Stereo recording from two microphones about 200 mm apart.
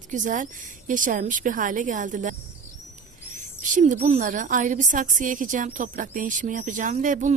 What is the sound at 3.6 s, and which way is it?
A woman's voice, 40° right (ahead or behind).